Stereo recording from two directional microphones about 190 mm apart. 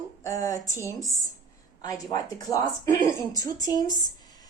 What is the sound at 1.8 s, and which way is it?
A woman's voice, 20° left (ahead or behind).